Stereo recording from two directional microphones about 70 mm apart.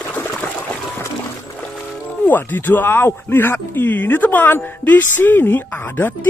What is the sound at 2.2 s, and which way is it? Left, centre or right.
Speech, left.